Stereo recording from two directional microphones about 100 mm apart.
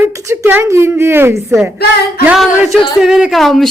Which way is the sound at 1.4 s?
Centre (ahead or behind).